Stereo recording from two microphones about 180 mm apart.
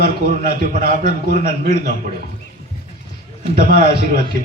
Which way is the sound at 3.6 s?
50° right (ahead or behind).